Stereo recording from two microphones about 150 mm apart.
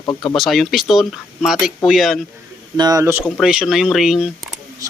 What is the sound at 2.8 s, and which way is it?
Speech, 25° right (ahead or behind).